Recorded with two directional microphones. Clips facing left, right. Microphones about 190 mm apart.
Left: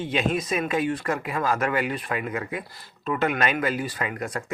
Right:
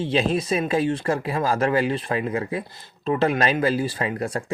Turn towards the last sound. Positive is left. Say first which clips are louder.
# right 4 dB
turn(degrees=-30)  # may be behind; listen again after turning